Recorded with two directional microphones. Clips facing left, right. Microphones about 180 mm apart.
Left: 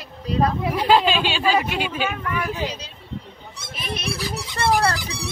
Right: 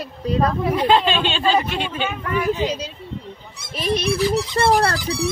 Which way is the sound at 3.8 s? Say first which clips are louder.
Right 9 dB; 35° right (ahead or behind).